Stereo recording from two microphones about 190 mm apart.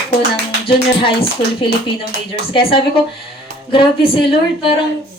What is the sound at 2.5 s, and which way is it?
A woman's voice, 30° left (ahead or behind).